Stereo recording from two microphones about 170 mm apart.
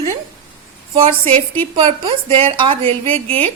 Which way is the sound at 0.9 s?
35° right (ahead or behind).